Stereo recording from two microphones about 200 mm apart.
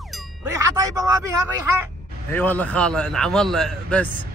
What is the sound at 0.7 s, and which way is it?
Speech, 15° right (ahead or behind).